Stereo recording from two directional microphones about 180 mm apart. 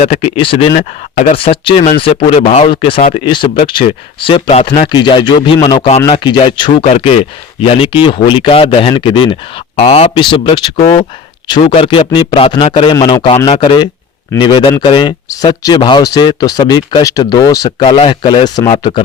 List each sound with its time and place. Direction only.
0.0 s speech: 35° left (ahead or behind)